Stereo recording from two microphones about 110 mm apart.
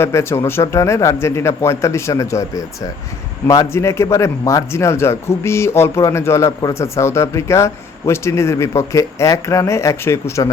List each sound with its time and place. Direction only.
0.0 s speech: 25° left (ahead or behind)